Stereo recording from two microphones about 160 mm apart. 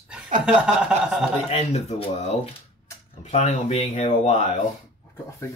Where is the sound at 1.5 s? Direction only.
45° left (ahead or behind).